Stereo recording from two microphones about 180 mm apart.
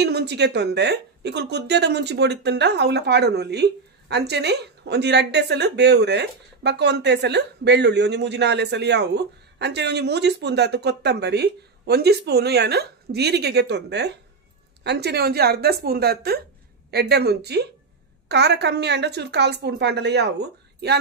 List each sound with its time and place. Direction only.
0.0 s a woman's voice: 65° right (ahead or behind)